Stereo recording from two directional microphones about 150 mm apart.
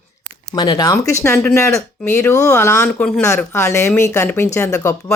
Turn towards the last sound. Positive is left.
turn(degrees=20)  # may be behind; listen again after turning